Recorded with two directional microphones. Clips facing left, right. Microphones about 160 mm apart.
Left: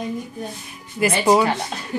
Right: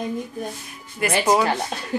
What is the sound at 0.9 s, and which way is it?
Speech, centre (ahead or behind).